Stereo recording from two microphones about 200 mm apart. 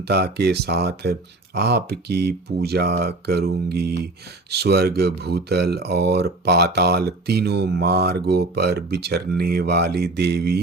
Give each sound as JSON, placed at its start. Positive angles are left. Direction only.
{"t": 0.1, "sound": "speech", "side_deg": -55}